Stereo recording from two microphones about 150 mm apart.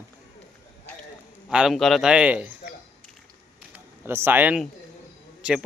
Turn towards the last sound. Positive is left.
turn(degrees=-5)  # may be behind; listen again after turning